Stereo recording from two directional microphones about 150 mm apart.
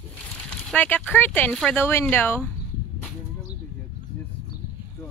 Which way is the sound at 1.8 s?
15° left (ahead or behind).